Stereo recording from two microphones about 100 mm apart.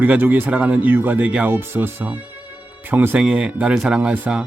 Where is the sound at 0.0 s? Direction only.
15° right (ahead or behind).